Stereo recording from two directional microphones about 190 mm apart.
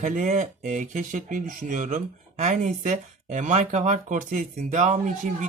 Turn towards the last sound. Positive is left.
turn(degrees=-40)  # may be behind; listen again after turning